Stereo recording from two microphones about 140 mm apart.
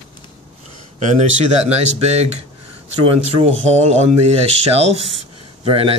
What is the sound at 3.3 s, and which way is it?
A man's voice, 50° right (ahead or behind).